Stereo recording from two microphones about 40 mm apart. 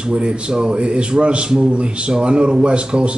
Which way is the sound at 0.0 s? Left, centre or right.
Right.